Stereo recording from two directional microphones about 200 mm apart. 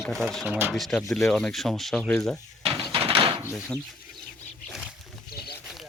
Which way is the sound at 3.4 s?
15° left (ahead or behind).